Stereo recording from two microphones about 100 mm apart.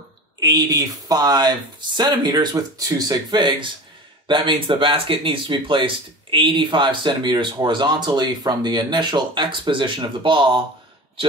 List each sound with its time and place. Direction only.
0.4 s speech: 40° right (ahead or behind); by 10.6 s 55° right (ahead or behind)